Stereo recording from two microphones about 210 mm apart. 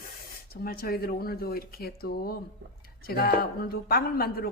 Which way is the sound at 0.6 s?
45° left (ahead or behind).